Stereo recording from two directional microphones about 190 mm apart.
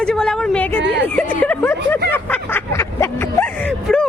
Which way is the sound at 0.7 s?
70° right (ahead or behind).